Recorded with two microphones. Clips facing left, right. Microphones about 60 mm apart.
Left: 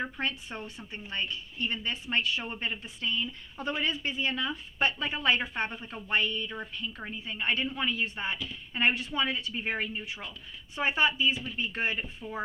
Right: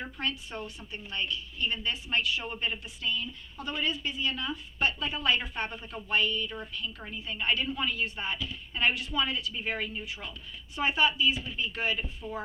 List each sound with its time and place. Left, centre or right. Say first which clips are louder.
0.0 s a woman's voice: left 2 dB; left
2.6 s a woman's voice: right 1 dB; left